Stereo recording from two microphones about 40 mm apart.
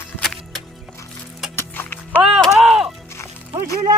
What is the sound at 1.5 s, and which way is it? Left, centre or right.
Music, left.